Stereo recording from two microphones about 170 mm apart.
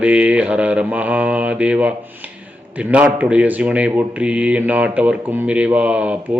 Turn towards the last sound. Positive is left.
turn(degrees=-10)  # may be behind; listen again after turning